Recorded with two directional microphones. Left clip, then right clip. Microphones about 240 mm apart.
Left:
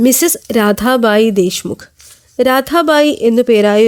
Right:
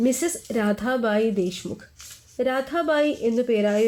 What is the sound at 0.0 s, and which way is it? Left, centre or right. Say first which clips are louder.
Speech: left 11 dB; left.